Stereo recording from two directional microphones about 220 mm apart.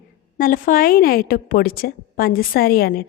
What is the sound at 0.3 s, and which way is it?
A woman's voice, 40° left (ahead or behind).